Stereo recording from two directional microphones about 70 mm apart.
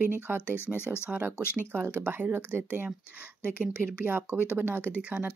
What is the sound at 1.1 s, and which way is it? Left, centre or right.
Speech, centre.